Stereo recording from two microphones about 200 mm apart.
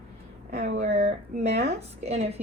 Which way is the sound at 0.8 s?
30° right (ahead or behind).